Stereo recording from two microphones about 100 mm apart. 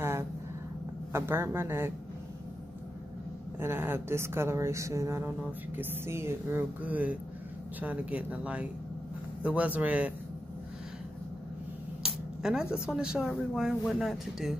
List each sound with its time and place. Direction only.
1.1 s speech: 25° right (ahead or behind)
3.5 s speech: 25° right (ahead or behind)
6.8 s speech: 15° right (ahead or behind)
12.0 s a sound: 5° right (ahead or behind)
12.7 s speech: 10° right (ahead or behind)